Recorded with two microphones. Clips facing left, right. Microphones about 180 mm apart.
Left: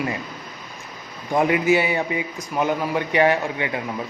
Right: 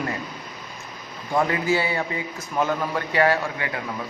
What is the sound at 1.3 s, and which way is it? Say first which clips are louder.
A man's voice: left 4 dB; 20° left (ahead or behind).